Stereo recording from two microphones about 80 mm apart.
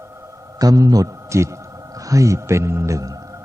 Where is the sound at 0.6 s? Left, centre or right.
Right.